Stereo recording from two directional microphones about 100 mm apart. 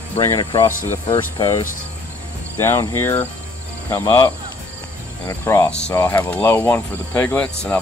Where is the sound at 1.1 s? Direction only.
40° left (ahead or behind).